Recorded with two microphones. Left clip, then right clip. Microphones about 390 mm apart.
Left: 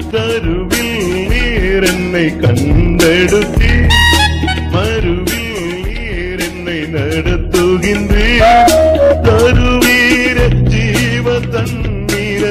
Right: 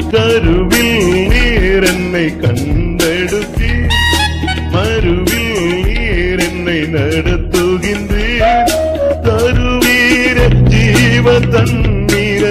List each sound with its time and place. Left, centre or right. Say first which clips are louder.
0.1 s music: right 4 dB; right
1.4 s music: right 2 dB; right
1.7 s music: even; centre
3.0 s music: left 4 dB; left
3.9 s music: left 3 dB; left
7.5 s music: left 2 dB; centre
8.3 s music: left 4 dB; left
9.7 s music: left 1 dB; centre
10.0 s music: even; centre
10.9 s music: right 5 dB; right